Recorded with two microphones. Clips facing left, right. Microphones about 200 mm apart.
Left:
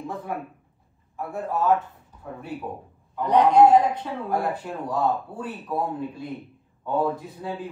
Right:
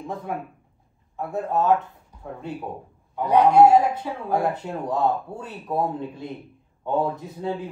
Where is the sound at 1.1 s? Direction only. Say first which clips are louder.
Right 3 dB; 20° right (ahead or behind).